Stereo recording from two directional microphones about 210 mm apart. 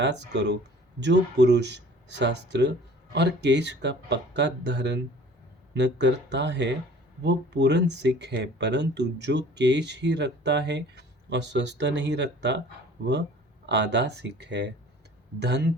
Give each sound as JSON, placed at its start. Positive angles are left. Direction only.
{"t": 0.0, "sound": "speech", "side_deg": -55}
{"t": 13.7, "sound": "speech", "side_deg": -55}